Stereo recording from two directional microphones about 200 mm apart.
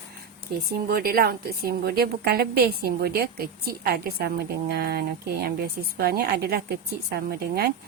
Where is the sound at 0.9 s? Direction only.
50° right (ahead or behind).